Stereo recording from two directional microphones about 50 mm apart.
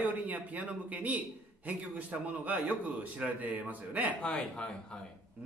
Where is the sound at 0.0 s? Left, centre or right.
Right.